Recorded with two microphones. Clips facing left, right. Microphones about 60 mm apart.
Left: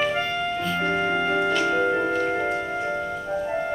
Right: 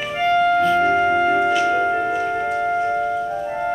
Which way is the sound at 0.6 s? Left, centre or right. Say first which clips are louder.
Right 8 dB; centre.